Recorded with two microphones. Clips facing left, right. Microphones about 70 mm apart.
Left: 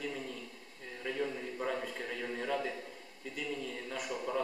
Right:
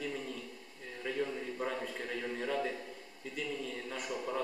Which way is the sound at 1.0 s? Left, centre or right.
Centre.